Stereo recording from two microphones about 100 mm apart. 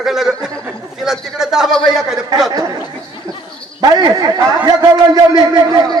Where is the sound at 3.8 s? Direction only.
35° right (ahead or behind).